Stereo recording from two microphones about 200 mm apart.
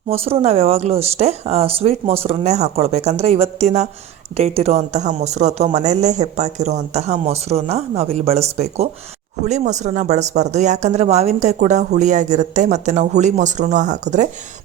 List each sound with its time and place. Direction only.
0.1 s speech: 30° right (ahead or behind)